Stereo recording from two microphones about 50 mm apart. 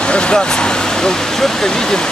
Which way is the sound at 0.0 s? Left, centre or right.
Centre.